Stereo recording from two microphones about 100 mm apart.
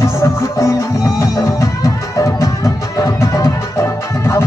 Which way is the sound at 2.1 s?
30° left (ahead or behind).